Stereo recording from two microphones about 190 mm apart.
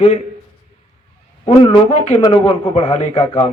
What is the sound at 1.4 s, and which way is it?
Speech, 35° left (ahead or behind).